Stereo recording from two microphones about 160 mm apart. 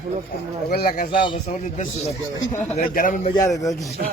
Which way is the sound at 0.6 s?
80° left.